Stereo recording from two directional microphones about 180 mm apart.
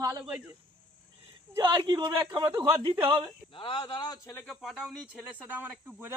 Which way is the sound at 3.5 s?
30° left (ahead or behind).